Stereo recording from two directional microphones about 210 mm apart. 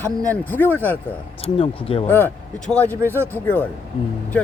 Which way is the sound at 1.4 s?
25° left (ahead or behind).